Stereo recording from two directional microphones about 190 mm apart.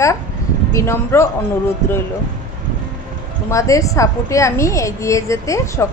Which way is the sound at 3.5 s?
15° left (ahead or behind).